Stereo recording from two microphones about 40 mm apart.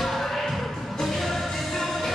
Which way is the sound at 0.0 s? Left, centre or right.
Centre.